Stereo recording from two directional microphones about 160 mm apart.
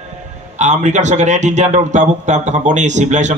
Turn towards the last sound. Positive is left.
turn(degrees=-50)  # may be behind; listen again after turning